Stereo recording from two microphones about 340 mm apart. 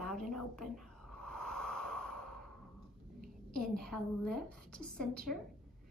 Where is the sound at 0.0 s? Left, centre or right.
Centre.